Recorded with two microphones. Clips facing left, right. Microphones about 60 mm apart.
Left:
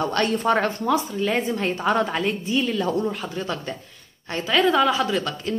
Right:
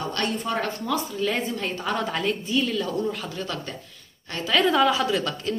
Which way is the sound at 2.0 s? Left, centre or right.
Centre.